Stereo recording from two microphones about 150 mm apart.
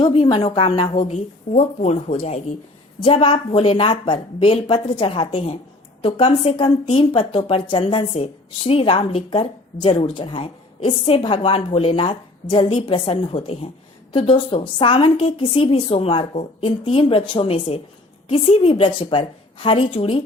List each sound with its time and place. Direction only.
0.0 s a woman's voice: 35° left (ahead or behind)